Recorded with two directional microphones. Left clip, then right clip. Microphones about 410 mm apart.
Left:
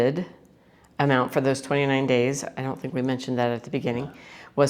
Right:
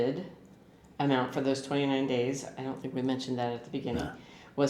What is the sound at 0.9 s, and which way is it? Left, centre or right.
Speech, left.